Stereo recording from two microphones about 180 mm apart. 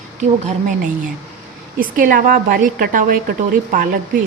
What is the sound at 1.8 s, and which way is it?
A woman's voice, 50° right (ahead or behind).